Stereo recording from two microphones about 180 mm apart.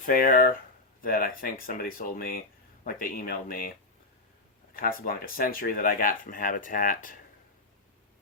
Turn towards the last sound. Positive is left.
turn(degrees=50)  # may be behind; listen again after turning